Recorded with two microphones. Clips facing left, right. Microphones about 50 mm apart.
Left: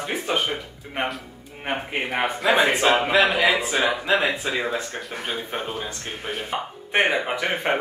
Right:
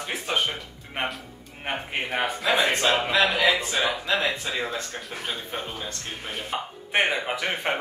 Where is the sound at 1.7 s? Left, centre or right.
Centre.